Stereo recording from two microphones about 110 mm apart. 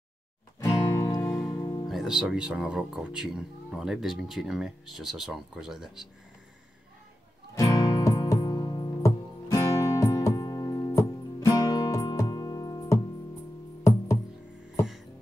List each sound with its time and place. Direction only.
0.6 s music: 30° left (ahead or behind)
1.2 s music: 15° left (ahead or behind)
1.5 s music: 30° left (ahead or behind)
1.9 s speech: 5° right (ahead or behind)
7.5 s music: 35° left (ahead or behind)